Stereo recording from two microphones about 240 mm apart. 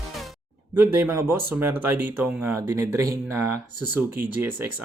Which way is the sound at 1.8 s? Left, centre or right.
Centre.